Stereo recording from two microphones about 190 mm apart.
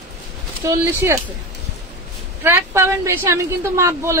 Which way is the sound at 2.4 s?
15° right (ahead or behind).